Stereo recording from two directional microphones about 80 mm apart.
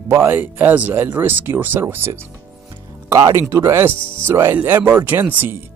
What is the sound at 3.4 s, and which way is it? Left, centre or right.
Speech, right.